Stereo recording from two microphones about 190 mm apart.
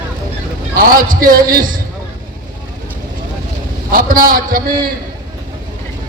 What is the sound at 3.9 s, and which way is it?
Speech, 50° right (ahead or behind).